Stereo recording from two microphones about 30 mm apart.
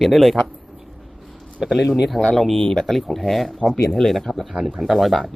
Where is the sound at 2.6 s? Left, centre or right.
Centre.